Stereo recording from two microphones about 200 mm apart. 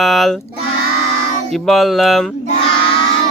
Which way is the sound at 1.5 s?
Centre (ahead or behind).